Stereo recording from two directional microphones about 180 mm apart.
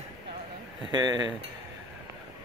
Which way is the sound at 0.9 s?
25° right (ahead or behind).